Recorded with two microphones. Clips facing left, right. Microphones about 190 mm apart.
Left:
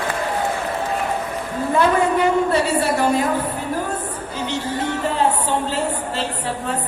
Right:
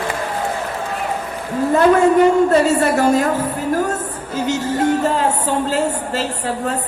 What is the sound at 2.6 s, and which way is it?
Speech, 45° right (ahead or behind).